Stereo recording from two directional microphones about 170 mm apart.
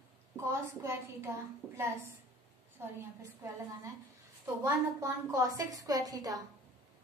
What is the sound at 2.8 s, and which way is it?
Speech, 15° right (ahead or behind).